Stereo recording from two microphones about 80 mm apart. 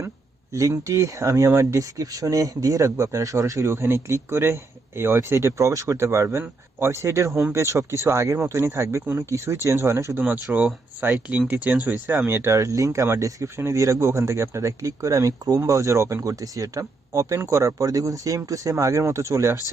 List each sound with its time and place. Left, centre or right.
0.5 s speech: right
10.2 s speech: right